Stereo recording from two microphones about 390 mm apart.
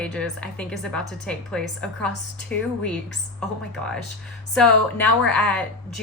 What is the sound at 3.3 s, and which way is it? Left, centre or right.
Speech, centre.